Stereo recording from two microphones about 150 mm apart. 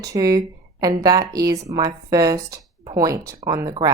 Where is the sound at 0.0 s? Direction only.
25° right (ahead or behind).